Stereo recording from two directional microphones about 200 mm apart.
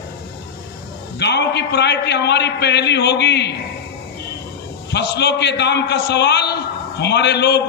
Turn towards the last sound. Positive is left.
turn(degrees=60)  # may be behind; listen again after turning